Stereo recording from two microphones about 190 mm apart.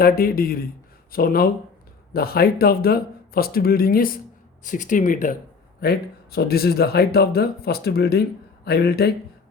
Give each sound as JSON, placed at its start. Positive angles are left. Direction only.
{"t": 0.0, "sound": "speech", "side_deg": 50}
{"t": 5.8, "sound": "speech", "side_deg": 55}